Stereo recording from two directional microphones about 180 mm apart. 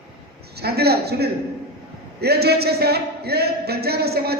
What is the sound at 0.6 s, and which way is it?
A man's voice, 60° right (ahead or behind).